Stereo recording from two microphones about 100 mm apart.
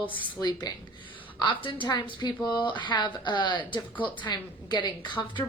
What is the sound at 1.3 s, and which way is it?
A woman's voice, 55° left (ahead or behind).